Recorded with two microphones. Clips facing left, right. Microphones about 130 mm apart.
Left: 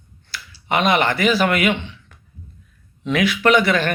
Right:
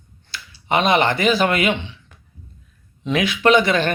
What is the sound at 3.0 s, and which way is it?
Speech, 20° right (ahead or behind).